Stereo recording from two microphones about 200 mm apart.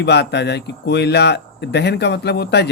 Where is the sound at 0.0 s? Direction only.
55° left (ahead or behind).